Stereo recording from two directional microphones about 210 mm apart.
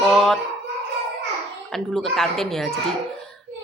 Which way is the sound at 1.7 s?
Centre (ahead or behind).